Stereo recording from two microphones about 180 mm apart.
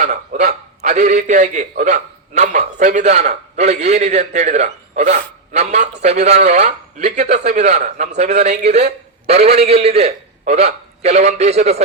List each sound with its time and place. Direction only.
0.0 s a man's voice: 40° right (ahead or behind)